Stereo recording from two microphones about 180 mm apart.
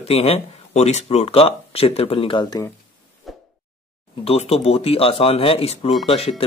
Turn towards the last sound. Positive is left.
turn(degrees=30)  # may be behind; listen again after turning